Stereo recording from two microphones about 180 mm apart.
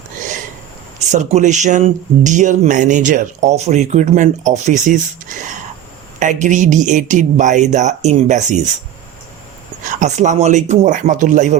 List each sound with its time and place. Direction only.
0.9 s speech: 40° right (ahead or behind)
10.0 s speech: 40° right (ahead or behind)